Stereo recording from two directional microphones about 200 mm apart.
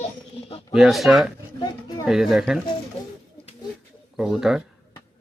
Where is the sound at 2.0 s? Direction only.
Centre (ahead or behind).